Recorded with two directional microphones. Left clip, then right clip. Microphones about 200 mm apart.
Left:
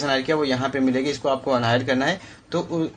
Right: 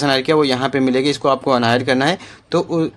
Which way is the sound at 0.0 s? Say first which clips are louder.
Right 7 dB; 45° right (ahead or behind).